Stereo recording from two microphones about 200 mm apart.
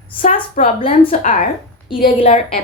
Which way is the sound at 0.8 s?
35° left (ahead or behind).